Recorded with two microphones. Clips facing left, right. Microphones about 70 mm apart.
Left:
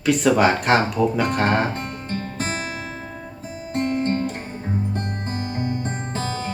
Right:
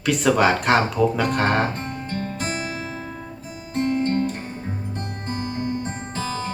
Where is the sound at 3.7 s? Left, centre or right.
Left.